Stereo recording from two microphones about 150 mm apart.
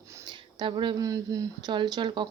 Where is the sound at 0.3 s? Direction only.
30° right (ahead or behind).